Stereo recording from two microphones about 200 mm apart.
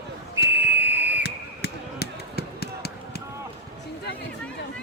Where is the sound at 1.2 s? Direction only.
55° left (ahead or behind).